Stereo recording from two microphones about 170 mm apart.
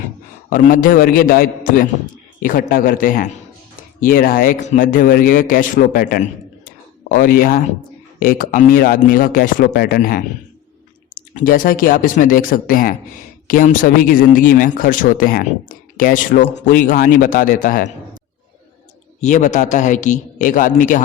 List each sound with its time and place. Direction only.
0.5 s speech: 55° left (ahead or behind)
19.2 s a man's voice: 45° left (ahead or behind)